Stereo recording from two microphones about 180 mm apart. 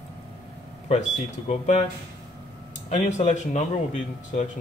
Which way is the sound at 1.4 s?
40° left (ahead or behind).